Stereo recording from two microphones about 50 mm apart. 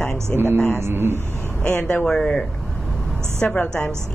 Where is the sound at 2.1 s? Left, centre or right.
Centre.